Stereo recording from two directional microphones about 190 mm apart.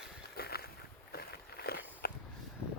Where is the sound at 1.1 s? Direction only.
55° left (ahead or behind).